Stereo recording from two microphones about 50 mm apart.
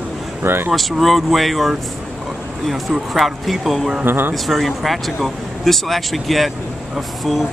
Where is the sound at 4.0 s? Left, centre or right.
Right.